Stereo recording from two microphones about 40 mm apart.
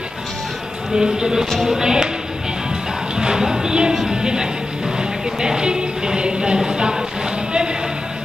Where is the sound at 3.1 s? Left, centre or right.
Centre.